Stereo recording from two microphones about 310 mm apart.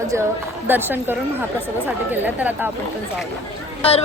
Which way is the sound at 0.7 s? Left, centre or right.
Centre.